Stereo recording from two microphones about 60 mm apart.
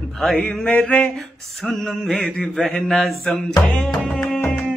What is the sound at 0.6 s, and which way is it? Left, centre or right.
Music, left.